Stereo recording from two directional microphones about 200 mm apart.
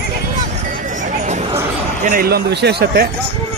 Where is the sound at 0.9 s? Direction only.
40° right (ahead or behind).